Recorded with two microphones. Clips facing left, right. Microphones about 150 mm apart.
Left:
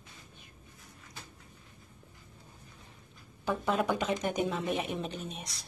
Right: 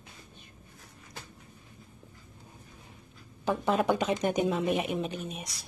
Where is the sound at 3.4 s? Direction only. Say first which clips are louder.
Right 3 dB; 20° right (ahead or behind).